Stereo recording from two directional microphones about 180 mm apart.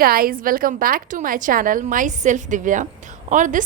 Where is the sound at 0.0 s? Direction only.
55° right (ahead or behind).